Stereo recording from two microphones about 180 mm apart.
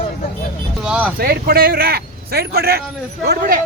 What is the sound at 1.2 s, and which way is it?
A man's voice, 55° right (ahead or behind).